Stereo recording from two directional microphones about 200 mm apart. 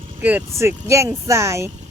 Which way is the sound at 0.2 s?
10° right (ahead or behind).